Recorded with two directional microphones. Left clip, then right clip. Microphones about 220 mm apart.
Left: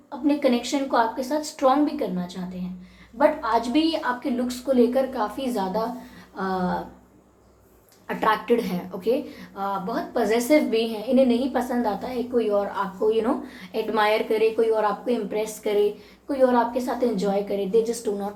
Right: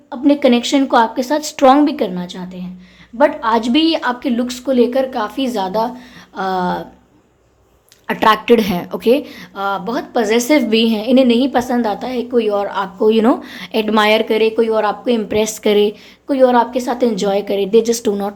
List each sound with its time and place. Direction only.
0.3 s a woman's voice: 45° right (ahead or behind)
8.0 s speech: 40° right (ahead or behind)